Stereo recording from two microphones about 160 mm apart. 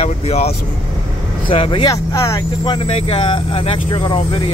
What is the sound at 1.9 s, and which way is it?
Speech, 20° left (ahead or behind).